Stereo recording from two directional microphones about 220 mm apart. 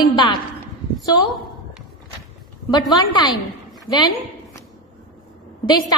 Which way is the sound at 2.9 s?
20° left (ahead or behind).